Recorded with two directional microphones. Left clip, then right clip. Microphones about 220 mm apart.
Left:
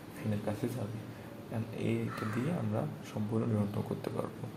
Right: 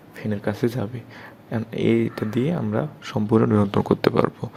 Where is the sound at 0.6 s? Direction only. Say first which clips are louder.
Right 13 dB; 50° right (ahead or behind).